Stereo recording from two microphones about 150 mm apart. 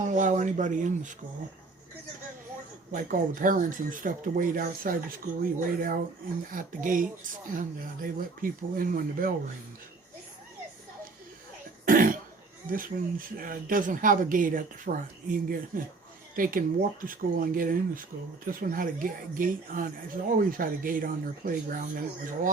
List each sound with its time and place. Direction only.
0.0 s speech: 55° right (ahead or behind)
2.9 s speech: 65° right (ahead or behind)
11.9 s cough: 70° right (ahead or behind)
12.7 s speech: 70° right (ahead or behind)